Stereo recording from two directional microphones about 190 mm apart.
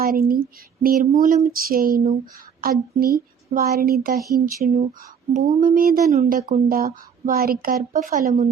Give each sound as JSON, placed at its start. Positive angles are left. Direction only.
{"t": 0.0, "sound": "speech", "side_deg": -50}
{"t": 5.3, "sound": "speech", "side_deg": -40}